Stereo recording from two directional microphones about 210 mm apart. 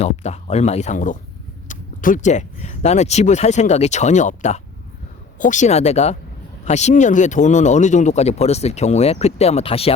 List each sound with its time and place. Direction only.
0.0 s speech: 30° left (ahead or behind)